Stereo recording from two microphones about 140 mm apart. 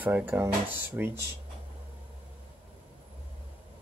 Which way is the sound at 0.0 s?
15° right (ahead or behind).